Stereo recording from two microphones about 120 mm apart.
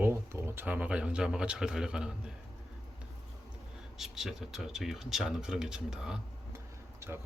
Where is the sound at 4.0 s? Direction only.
Centre (ahead or behind).